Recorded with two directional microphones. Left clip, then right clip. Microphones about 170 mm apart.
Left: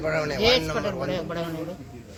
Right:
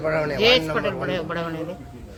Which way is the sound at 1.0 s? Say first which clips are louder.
Right 3 dB; 5° right (ahead or behind).